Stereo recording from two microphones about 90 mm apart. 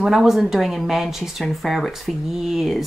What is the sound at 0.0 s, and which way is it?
Speech, 5° right (ahead or behind).